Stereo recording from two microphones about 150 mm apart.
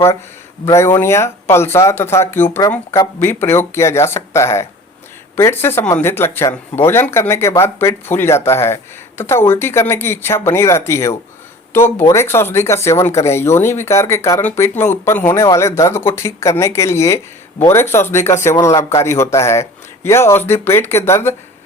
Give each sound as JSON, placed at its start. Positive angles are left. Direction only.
{"t": 0.6, "sound": "speech", "side_deg": 20}